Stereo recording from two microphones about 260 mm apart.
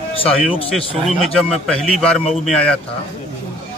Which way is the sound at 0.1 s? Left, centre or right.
Left.